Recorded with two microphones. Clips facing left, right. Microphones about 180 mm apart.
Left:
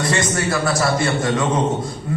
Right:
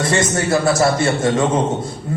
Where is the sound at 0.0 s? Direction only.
25° right (ahead or behind).